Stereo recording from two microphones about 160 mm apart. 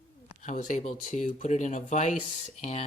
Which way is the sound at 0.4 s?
55° left (ahead or behind).